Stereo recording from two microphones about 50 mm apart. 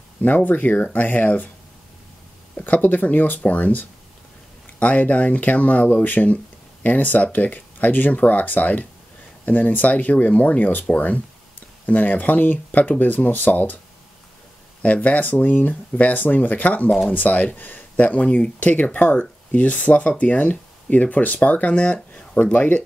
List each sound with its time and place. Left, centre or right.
0.5 s speech: left
2.6 s speech: left
14.8 s speech: left